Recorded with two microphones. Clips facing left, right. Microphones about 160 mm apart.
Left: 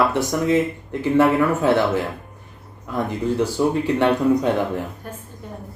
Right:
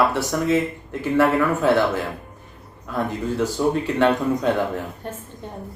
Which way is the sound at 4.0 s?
15° left (ahead or behind).